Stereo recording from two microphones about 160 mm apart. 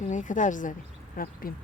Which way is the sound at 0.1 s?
50° left (ahead or behind).